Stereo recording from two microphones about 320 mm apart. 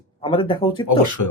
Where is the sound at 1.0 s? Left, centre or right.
Left.